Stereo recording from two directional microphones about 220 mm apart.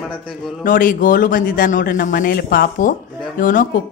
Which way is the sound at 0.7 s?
40° left (ahead or behind).